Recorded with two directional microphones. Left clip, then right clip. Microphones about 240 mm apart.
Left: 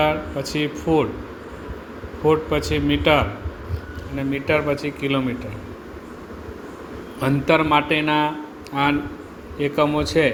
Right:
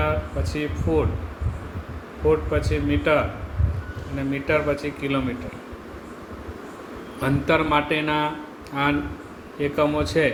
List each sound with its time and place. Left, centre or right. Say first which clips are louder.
0.0 s a man's voice: left 5 dB; left
2.2 s a man's voice: left 2 dB; left
7.2 s a man's voice: left 3 dB; left